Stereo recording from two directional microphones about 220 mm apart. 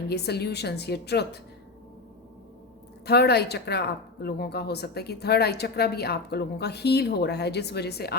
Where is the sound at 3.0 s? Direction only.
45° left (ahead or behind).